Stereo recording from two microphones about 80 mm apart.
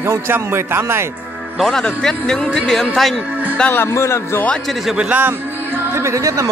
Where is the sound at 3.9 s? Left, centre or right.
Left.